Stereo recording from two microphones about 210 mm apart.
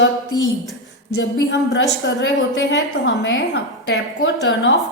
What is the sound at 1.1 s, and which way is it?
A woman's voice, 55° left (ahead or behind).